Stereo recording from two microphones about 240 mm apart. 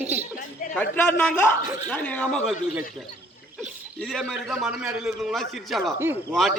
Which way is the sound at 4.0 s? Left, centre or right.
Centre.